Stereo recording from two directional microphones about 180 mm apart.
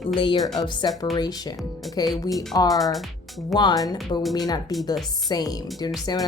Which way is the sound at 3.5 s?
20° left (ahead or behind).